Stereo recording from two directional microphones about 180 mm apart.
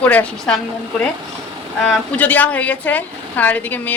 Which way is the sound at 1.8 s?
10° left (ahead or behind).